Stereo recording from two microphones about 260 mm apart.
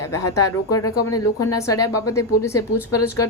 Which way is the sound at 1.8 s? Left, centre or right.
Left.